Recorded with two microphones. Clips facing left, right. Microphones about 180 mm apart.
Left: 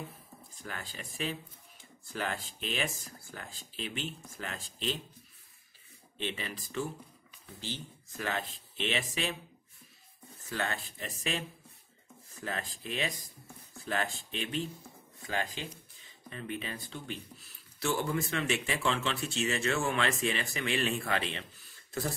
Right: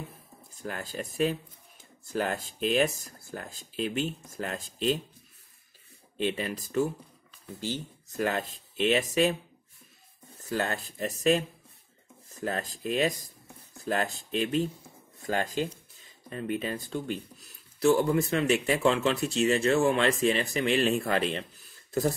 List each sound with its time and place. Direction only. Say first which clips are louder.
0.6 s speech: right 8 dB; 45° right (ahead or behind)
6.1 s speech: right 8 dB; 45° right (ahead or behind)
10.5 s speech: right 5 dB; 40° right (ahead or behind)
17.8 s speech: right 9 dB; 35° right (ahead or behind)